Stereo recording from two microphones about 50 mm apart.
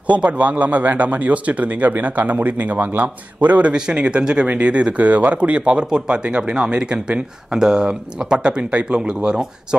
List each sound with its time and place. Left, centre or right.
0.1 s speech: right